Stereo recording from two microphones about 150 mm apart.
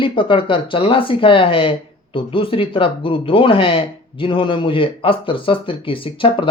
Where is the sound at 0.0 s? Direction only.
35° left (ahead or behind).